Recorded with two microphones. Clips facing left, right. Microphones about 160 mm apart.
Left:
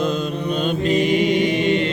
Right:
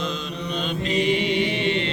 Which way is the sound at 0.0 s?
50° left (ahead or behind).